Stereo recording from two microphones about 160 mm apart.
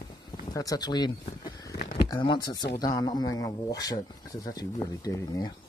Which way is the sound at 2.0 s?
30° left (ahead or behind).